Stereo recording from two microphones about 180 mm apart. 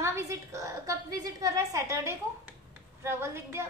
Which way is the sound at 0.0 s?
15° right (ahead or behind).